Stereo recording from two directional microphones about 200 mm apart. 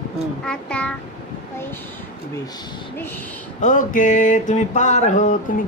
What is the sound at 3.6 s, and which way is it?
Mantra, 40° left (ahead or behind).